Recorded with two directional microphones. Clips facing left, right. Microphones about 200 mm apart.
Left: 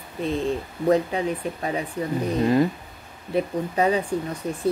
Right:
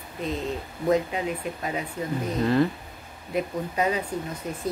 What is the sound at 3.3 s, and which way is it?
Speech, 30° left (ahead or behind).